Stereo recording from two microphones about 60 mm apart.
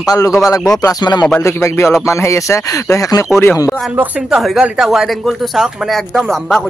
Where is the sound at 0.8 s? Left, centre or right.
Left.